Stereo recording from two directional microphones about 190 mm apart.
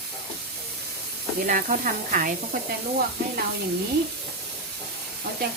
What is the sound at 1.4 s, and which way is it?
Speech, 45° right (ahead or behind).